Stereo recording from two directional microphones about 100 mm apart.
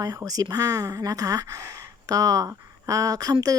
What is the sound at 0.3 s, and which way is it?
Speech, 40° right (ahead or behind).